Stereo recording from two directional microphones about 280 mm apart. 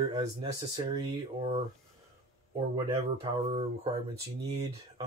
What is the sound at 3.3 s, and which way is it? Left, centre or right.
Speech, centre.